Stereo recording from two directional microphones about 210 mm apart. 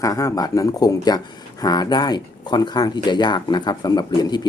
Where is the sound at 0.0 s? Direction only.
15° left (ahead or behind).